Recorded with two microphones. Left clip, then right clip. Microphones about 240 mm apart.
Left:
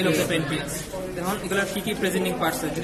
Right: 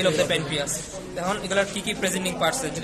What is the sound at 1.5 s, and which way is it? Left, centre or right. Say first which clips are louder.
A man's voice: even; right.